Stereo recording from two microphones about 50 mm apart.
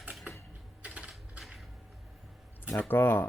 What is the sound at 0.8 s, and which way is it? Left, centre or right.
Typewriter, right.